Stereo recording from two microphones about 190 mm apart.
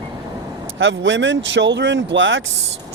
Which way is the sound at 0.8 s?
85° right.